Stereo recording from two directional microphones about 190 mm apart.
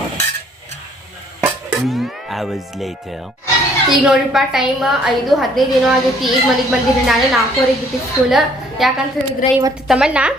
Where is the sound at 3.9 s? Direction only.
Centre (ahead or behind).